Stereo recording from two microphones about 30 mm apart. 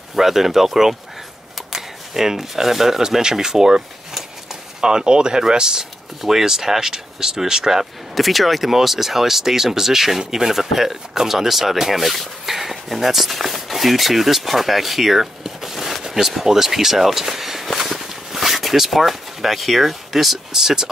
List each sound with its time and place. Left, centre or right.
0.1 s speech: centre
3.2 s speech: right
4.8 s speech: right
8.1 s speech: centre